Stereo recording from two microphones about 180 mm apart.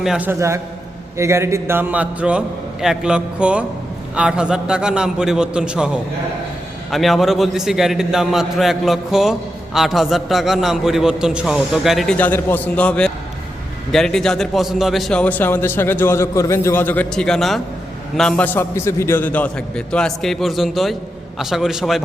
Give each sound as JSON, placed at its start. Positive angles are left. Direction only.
{"t": 0.0, "sound": "a man's voice", "side_deg": -5}